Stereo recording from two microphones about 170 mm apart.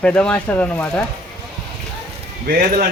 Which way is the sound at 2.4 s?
55° right (ahead or behind).